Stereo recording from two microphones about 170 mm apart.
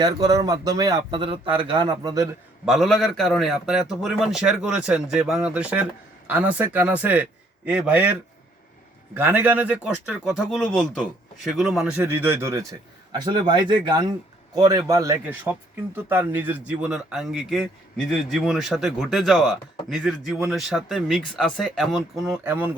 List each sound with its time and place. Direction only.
0.0 s a man's voice: 20° right (ahead or behind)
2.6 s a man's voice: centre (ahead or behind)
9.1 s a man's voice: 10° right (ahead or behind)